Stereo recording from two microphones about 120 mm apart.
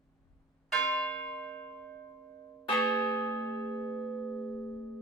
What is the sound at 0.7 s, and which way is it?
Church bell, 5° left (ahead or behind).